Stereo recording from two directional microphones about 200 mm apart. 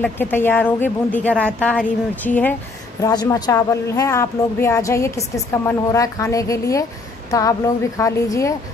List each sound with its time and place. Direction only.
0.0 s speech: 10° left (ahead or behind)